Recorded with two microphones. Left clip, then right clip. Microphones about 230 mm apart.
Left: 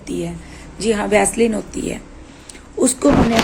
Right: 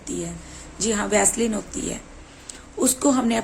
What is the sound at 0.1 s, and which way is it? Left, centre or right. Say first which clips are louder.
Speech: left 6 dB; centre.